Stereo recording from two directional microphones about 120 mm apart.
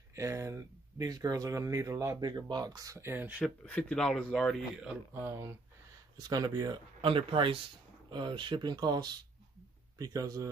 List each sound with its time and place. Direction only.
0.1 s speech: 25° right (ahead or behind)
3.6 s speech: 10° left (ahead or behind)
5.1 s speech: 20° right (ahead or behind)
6.1 s speech: 35° right (ahead or behind)
7.0 s speech: 50° right (ahead or behind); by 10.5 s 30° right (ahead or behind)